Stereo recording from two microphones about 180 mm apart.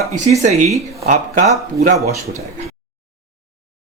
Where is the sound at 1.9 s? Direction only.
15° right (ahead or behind).